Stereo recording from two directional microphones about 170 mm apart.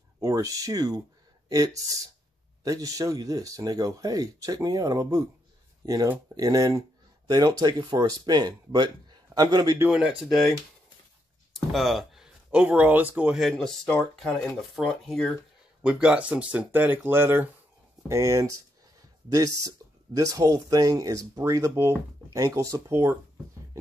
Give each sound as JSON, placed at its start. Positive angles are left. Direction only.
{"t": 0.2, "sound": "speech", "side_deg": -20}
{"t": 9.8, "sound": "speech", "side_deg": -5}
{"t": 11.5, "sound": "speech", "side_deg": 0}